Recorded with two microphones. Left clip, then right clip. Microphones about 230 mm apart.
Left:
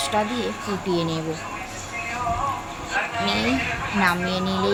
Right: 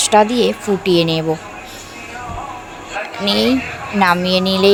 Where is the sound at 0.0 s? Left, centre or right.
Right.